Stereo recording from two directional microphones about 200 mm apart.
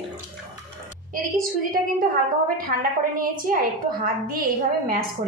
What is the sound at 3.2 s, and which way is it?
A woman's voice, 45° right (ahead or behind).